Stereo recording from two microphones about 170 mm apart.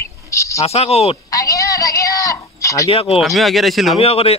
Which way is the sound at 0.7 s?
35° left (ahead or behind).